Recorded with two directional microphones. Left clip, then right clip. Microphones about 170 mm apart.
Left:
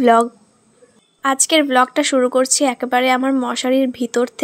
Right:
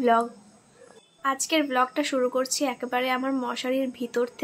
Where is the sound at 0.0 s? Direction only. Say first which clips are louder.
Left 9 dB; 55° left (ahead or behind).